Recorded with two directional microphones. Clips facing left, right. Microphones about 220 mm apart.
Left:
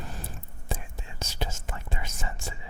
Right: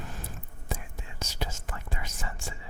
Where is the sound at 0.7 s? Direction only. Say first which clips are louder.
Left 1 dB; 25° left (ahead or behind).